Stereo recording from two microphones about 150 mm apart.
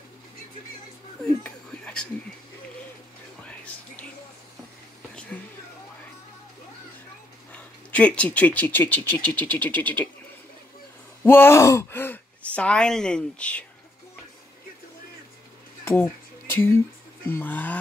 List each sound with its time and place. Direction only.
1.2 s a sound: 5° left (ahead or behind)
3.4 s music: 10° left (ahead or behind)
7.5 s speech: 10° left (ahead or behind)
11.2 s speech: 15° left (ahead or behind)
15.8 s a sound: 15° left (ahead or behind)
17.3 s speech: 10° left (ahead or behind)